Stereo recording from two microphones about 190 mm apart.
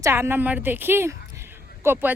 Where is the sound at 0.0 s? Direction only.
15° right (ahead or behind).